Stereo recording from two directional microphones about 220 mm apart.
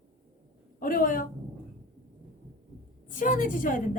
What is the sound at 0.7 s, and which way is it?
Speech, 40° left (ahead or behind).